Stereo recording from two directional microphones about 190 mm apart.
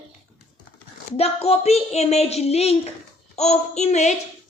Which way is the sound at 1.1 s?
30° left (ahead or behind).